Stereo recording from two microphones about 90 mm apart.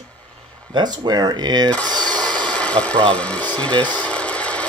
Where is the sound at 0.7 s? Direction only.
55° right (ahead or behind).